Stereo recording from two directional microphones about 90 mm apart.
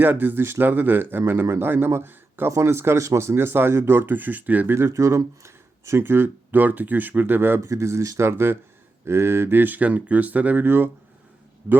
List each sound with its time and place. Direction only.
0.0 s a man's voice: 20° right (ahead or behind)